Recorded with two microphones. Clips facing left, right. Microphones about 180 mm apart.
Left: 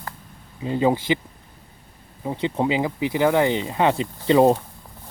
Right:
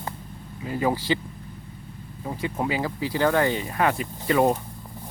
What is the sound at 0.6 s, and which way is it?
Speech, 25° left (ahead or behind).